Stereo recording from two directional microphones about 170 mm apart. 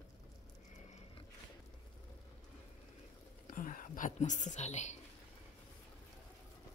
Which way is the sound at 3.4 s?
50° left (ahead or behind).